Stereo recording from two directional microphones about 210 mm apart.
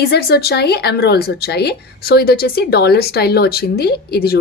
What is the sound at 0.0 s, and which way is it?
A woman's voice, 50° left (ahead or behind).